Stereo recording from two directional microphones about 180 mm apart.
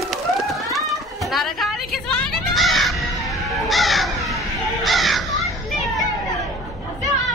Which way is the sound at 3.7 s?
Centre (ahead or behind).